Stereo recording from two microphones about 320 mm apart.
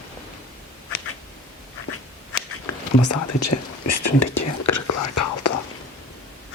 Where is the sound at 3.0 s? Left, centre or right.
Left.